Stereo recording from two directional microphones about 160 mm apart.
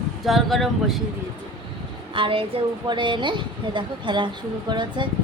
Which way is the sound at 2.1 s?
35° right (ahead or behind).